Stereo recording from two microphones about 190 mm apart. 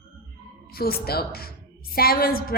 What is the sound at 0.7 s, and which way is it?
A woman's voice, 55° left (ahead or behind).